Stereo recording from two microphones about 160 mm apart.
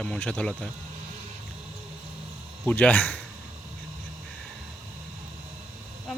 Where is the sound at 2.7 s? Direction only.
10° left (ahead or behind).